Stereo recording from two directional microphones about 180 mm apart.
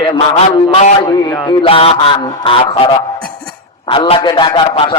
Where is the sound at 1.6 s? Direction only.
30° left (ahead or behind).